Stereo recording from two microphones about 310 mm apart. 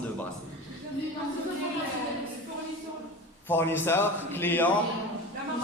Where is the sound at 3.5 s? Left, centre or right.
Centre.